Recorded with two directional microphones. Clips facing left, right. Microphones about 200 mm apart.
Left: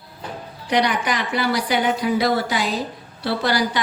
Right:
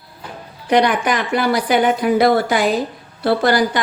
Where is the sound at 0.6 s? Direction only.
50° right (ahead or behind).